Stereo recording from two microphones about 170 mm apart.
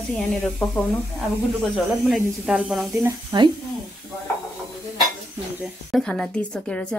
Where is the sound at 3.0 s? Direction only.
20° right (ahead or behind).